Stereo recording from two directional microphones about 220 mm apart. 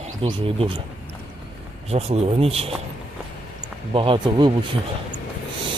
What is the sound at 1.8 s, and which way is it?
Speech, 30° right (ahead or behind).